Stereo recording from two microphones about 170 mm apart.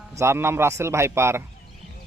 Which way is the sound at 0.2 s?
15° right (ahead or behind).